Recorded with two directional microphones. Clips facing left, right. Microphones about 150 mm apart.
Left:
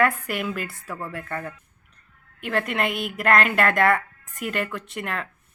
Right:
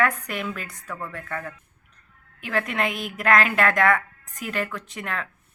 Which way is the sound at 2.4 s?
Centre (ahead or behind).